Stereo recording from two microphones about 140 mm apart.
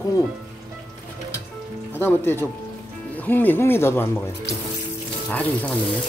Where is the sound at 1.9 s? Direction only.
15° left (ahead or behind).